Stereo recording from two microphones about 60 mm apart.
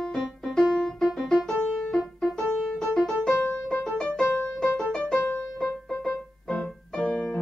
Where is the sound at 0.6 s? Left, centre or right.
Centre.